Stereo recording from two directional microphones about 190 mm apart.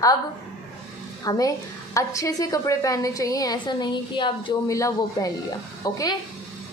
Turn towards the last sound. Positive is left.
turn(degrees=20)  # may be behind; listen again after turning